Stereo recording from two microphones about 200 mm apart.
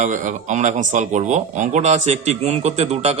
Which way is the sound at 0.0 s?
40° right (ahead or behind).